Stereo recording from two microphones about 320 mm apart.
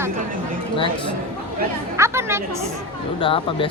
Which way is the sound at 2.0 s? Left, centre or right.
Centre.